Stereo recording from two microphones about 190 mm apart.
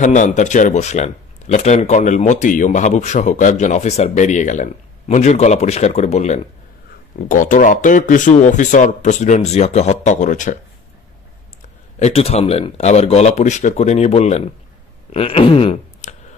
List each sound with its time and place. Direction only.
0.0 s speech: 40° left (ahead or behind)
12.0 s speech: 35° left (ahead or behind)